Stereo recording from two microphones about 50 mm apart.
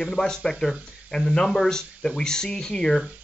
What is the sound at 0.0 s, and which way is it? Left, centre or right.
Speech, centre.